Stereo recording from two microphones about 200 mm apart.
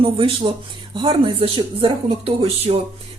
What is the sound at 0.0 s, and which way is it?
Speech, 25° right (ahead or behind).